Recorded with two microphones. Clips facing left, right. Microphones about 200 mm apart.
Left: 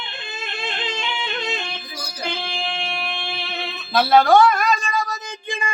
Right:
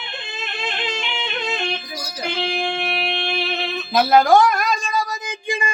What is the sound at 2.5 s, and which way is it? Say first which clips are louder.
Music: right 5 dB; 55° right (ahead or behind).